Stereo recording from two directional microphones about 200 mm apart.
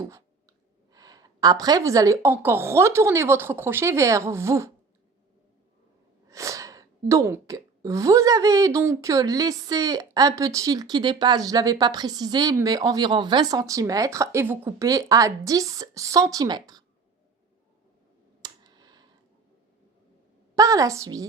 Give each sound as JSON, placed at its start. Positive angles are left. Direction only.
{"t": 0.9, "sound": "a woman's voice", "side_deg": -20}
{"t": 6.2, "sound": "a woman's voice", "side_deg": -15}
{"t": 18.4, "sound": "a sound", "side_deg": -20}
{"t": 20.6, "sound": "a woman's voice", "side_deg": -15}